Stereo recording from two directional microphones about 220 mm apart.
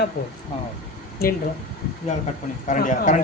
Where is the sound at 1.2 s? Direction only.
45° left (ahead or behind).